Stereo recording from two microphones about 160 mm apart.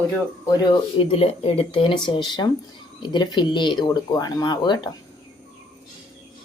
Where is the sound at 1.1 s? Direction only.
35° left (ahead or behind).